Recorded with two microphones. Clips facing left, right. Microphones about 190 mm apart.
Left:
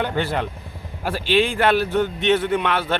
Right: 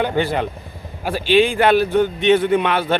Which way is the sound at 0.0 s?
Centre (ahead or behind).